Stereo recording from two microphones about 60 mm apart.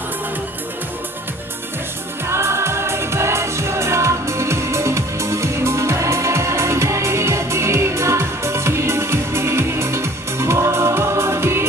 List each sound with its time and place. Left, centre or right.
2.3 s music: right